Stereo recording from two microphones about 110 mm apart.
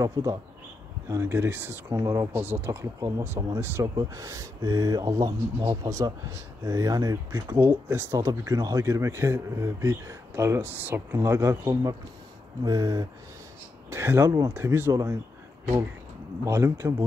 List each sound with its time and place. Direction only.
0.0 s speech: 30° right (ahead or behind)
13.8 s speech: 25° right (ahead or behind)
16.4 s speech: 25° right (ahead or behind)